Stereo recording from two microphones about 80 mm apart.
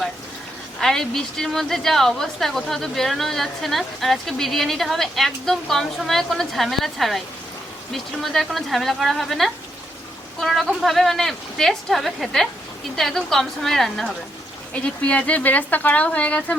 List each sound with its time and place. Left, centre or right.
0.8 s a woman's voice: centre
14.7 s speech: centre